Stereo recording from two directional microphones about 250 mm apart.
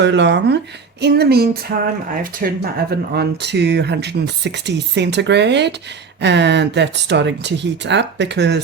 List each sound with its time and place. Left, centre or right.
0.0 s speech: right